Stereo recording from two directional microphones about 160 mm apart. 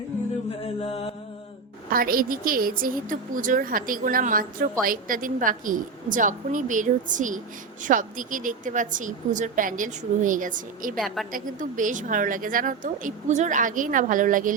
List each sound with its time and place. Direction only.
0.6 s mantra: 40° left (ahead or behind)
1.9 s a woman's voice: 65° right (ahead or behind)
10.9 s a woman's voice: centre (ahead or behind)
11.3 s a woman's voice: 55° right (ahead or behind)